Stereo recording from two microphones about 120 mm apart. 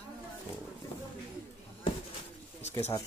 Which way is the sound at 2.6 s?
65° left (ahead or behind).